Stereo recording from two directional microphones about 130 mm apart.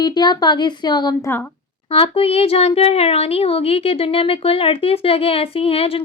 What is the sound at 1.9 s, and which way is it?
Speech, 45° left (ahead or behind).